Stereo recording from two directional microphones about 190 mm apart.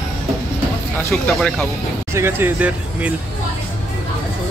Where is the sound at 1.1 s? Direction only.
5° left (ahead or behind).